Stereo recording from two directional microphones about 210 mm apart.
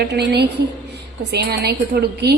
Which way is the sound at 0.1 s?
50° right (ahead or behind).